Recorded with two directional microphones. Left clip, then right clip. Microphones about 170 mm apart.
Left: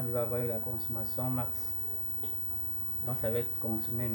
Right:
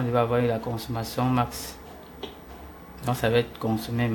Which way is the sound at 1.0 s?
80° right.